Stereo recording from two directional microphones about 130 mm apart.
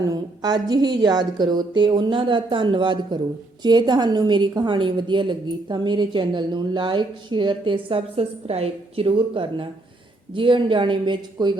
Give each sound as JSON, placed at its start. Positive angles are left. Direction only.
{"t": 0.0, "sound": "a woman's voice", "side_deg": -30}